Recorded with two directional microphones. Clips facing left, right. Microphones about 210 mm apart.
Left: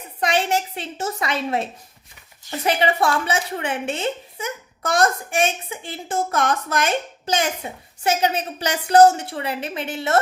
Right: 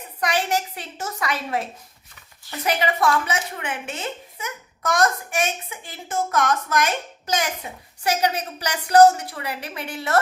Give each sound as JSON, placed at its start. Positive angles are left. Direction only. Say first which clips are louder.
{"t": 0.2, "sound": "speech", "louder": "left 2 dB", "side_deg": 25}